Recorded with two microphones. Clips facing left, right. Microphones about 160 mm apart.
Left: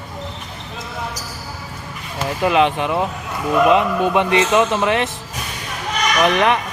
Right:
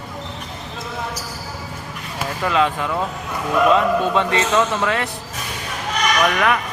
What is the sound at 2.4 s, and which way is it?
Speech, 20° left (ahead or behind).